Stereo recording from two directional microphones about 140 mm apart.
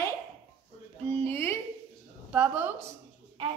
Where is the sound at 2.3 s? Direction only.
10° right (ahead or behind).